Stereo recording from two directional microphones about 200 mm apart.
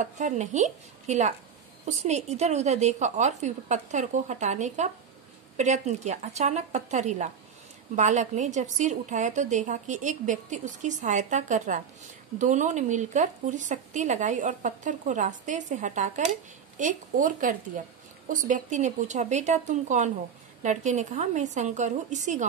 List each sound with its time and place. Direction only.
0.0 s a woman's voice: 35° right (ahead or behind)